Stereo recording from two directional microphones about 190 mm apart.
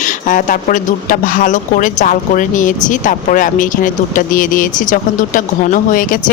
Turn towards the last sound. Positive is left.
turn(degrees=45)  # may be behind; listen again after turning